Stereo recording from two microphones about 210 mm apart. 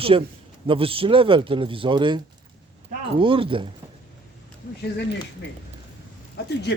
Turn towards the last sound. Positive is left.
turn(degrees=55)  # may be behind; listen again after turning